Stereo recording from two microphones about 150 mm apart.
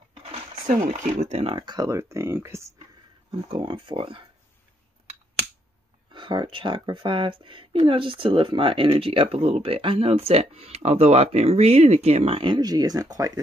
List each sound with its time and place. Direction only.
0.1 s a sound: 40° right (ahead or behind)
0.8 s speech: 50° right (ahead or behind)
1.5 s speech: 25° right (ahead or behind)
3.3 s speech: 30° right (ahead or behind)
6.1 s speech: 30° right (ahead or behind)